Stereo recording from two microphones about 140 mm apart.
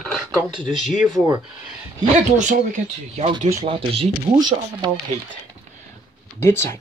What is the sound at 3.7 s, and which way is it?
Speech, 40° right (ahead or behind).